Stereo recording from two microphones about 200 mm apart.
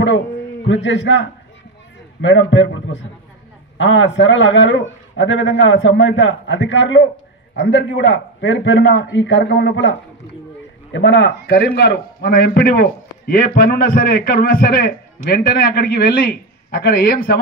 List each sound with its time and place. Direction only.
0.0 s a man's voice: 65° left (ahead or behind); by 17.4 s 50° left (ahead or behind)